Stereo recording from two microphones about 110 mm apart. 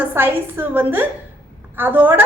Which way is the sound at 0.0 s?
15° right (ahead or behind).